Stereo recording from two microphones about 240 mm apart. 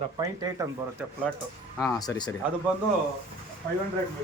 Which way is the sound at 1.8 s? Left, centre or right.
Centre.